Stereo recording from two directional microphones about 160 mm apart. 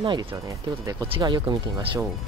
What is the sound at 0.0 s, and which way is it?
Speech, 30° right (ahead or behind).